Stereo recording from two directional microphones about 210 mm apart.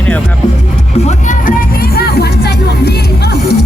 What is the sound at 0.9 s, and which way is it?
Music, 35° left (ahead or behind).